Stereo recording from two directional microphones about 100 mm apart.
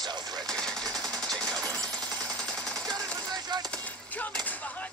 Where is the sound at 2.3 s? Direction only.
10° left (ahead or behind).